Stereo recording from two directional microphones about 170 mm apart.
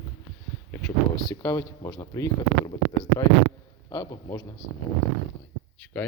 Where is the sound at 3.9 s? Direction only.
20° left (ahead or behind).